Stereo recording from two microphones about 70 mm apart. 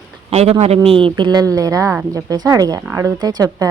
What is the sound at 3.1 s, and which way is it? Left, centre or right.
Speech, right.